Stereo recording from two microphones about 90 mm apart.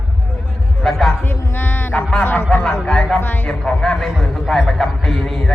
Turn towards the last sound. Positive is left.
turn(degrees=5)  # may be behind; listen again after turning